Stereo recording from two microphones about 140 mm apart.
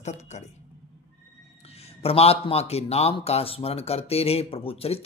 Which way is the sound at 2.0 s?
45° left (ahead or behind).